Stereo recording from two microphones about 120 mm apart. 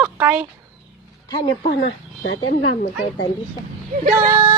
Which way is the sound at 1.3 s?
35° left (ahead or behind).